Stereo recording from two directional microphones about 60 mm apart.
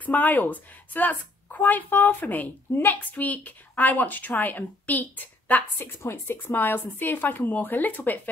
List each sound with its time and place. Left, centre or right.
0.0 s a woman's voice: left
5.8 s speech: left